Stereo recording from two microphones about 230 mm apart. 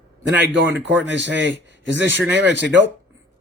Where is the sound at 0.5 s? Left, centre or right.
Right.